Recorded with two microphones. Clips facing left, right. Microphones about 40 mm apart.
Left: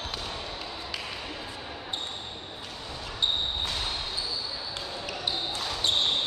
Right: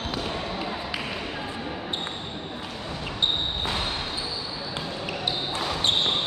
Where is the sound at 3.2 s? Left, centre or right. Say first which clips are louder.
Right 2 dB; right.